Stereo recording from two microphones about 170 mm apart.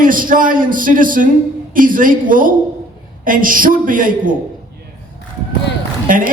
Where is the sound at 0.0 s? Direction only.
55° right (ahead or behind).